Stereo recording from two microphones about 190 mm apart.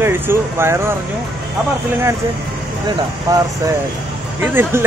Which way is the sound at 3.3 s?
20° right (ahead or behind).